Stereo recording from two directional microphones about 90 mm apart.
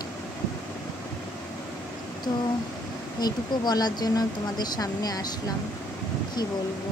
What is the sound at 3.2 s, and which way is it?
Speech, 50° left (ahead or behind).